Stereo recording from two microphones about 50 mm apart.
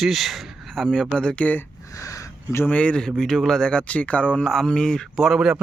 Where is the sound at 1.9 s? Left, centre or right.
Left.